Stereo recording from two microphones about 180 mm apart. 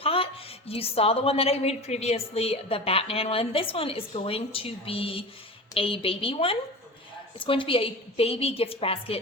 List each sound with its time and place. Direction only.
0.0 s music: 30° left (ahead or behind)
0.7 s a woman's voice: 30° left (ahead or behind)